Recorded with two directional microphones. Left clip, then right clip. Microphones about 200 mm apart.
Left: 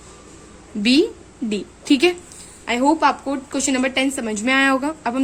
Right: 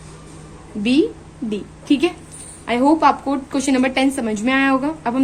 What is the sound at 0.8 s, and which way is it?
A woman's voice, 40° left (ahead or behind).